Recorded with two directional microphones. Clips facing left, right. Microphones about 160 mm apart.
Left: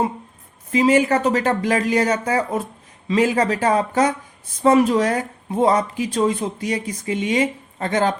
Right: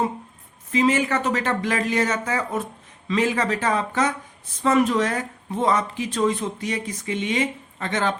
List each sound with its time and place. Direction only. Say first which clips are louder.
0.7 s speech: left 4 dB; 35° left (ahead or behind)